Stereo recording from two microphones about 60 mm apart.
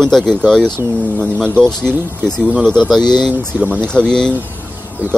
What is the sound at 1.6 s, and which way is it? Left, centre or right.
Speech, centre.